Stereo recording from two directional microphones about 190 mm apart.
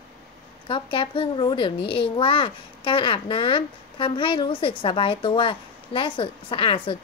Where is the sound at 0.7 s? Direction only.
25° left (ahead or behind).